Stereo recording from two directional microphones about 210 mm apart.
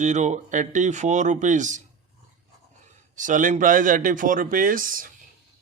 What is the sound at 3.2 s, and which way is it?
A man's voice, 40° right (ahead or behind).